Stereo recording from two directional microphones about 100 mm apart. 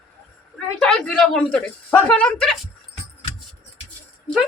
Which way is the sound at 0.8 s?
5° left (ahead or behind).